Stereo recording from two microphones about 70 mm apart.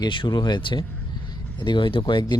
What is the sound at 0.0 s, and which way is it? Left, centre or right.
Speech, left.